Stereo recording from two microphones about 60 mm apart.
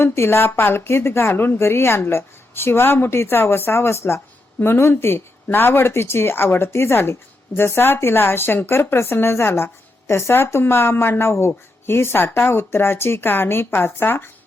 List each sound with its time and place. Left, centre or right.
0.0 s a woman's voice: left